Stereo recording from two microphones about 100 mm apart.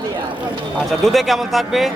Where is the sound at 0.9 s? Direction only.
Centre (ahead or behind).